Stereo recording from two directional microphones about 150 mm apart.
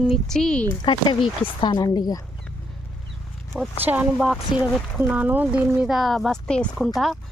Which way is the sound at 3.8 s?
10° right (ahead or behind).